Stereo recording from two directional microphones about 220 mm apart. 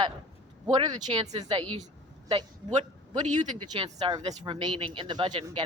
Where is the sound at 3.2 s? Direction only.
35° right (ahead or behind).